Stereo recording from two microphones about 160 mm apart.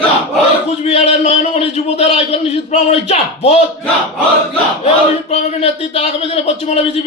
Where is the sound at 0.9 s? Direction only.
40° left (ahead or behind).